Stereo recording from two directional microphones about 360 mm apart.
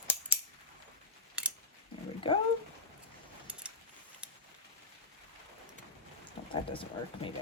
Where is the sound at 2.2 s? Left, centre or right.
Centre.